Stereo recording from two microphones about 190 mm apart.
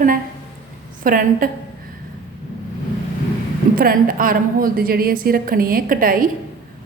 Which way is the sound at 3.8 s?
50° right (ahead or behind).